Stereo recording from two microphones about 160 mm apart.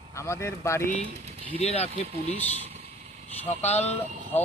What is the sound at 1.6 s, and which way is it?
Speech, 40° left (ahead or behind).